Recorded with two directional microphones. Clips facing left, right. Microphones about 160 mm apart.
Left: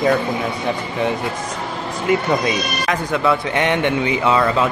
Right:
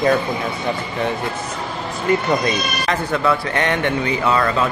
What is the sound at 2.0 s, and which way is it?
Speech, 5° left (ahead or behind).